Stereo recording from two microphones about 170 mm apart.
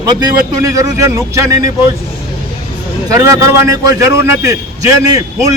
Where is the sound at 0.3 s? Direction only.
20° right (ahead or behind).